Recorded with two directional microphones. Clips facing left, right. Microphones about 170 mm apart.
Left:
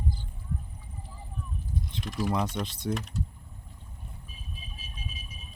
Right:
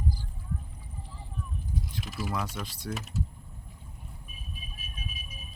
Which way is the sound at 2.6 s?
20° left (ahead or behind).